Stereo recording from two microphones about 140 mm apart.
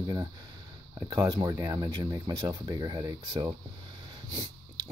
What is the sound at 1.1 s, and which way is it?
Speech, 25° right (ahead or behind).